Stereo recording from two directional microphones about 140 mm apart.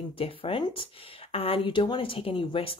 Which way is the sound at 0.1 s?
40° left (ahead or behind).